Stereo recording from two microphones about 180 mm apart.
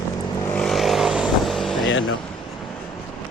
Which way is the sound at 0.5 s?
Centre (ahead or behind).